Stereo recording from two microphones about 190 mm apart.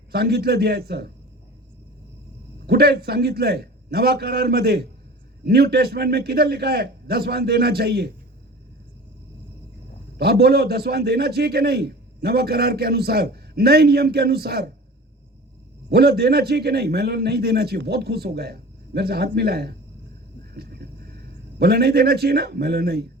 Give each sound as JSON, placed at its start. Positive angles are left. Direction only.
{"t": 0.1, "sound": "a man's voice", "side_deg": -55}
{"t": 2.6, "sound": "a man's voice", "side_deg": -55}
{"t": 10.2, "sound": "a man's voice", "side_deg": -60}
{"t": 15.9, "sound": "a man's voice", "side_deg": -55}
{"t": 20.5, "sound": "a sound", "side_deg": -55}
{"t": 21.6, "sound": "a man's voice", "side_deg": -55}